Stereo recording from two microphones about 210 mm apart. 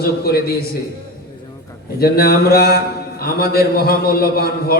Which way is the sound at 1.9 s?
45° left (ahead or behind).